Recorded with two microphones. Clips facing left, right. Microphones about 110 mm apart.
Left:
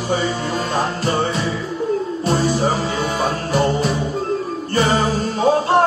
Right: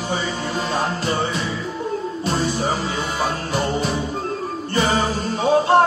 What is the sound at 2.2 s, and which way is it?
Music, 40° left (ahead or behind).